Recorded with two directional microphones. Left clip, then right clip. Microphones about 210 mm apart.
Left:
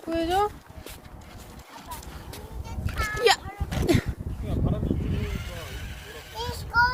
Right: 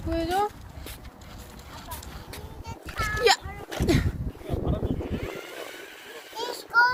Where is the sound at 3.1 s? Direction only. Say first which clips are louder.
Even; 5° left (ahead or behind).